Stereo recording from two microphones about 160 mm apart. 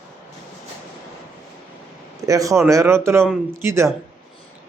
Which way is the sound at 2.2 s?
20° right (ahead or behind).